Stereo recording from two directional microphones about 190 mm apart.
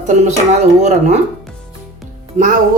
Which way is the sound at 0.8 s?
40° right (ahead or behind).